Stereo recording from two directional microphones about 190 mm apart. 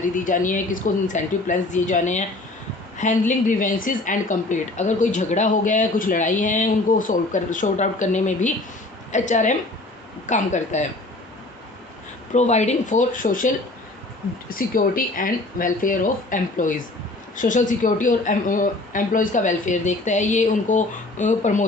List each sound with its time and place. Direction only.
0.3 s a woman's voice: 45° left (ahead or behind)
12.3 s a woman's voice: 35° left (ahead or behind)
14.5 s a woman's voice: 50° left (ahead or behind)